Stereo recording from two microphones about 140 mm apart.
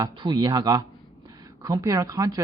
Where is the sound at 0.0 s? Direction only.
30° right (ahead or behind).